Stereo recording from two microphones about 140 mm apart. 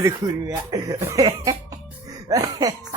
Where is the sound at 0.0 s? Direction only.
25° right (ahead or behind).